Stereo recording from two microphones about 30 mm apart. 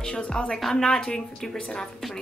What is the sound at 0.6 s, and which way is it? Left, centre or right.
Speech, centre.